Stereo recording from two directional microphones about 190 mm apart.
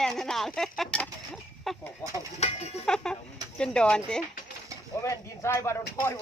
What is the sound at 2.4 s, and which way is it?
Speech, 35° left (ahead or behind).